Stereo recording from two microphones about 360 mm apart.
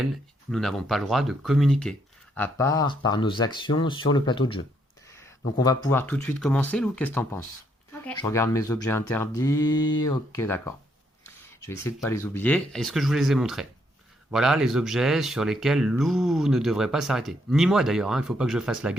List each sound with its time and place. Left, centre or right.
0.5 s speech: centre